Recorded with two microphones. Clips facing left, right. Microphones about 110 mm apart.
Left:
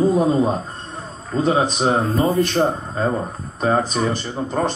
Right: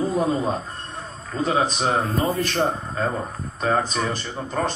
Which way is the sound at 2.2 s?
Centre (ahead or behind).